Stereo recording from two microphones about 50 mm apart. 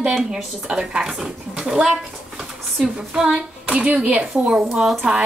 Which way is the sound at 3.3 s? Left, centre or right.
Right.